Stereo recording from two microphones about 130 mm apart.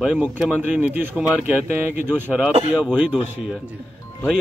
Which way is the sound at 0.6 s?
10° right (ahead or behind).